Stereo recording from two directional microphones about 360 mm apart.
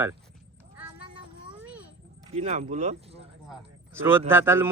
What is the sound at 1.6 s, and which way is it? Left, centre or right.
Children playing, centre.